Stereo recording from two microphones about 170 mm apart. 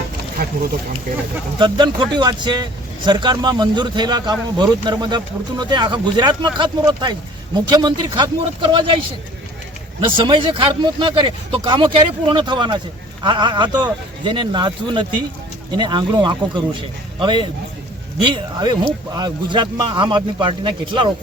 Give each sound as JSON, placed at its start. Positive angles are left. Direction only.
{"t": 0.4, "sound": "a sound", "side_deg": -65}
{"t": 1.5, "sound": "speech", "side_deg": -25}
{"t": 10.0, "sound": "speech", "side_deg": -30}